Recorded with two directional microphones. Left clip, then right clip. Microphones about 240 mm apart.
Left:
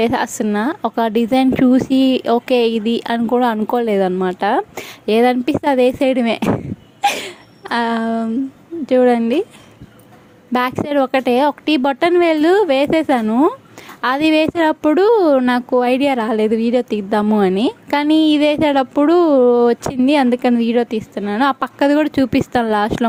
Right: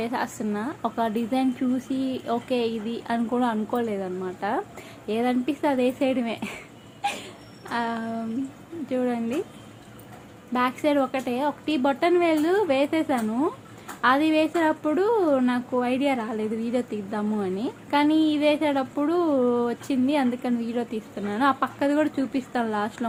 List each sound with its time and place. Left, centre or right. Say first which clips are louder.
0.0 s a woman's voice: left 11 dB; left
10.5 s a woman's voice: left 6 dB; left